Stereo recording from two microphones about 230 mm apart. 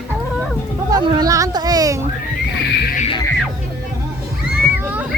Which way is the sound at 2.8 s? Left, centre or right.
Left.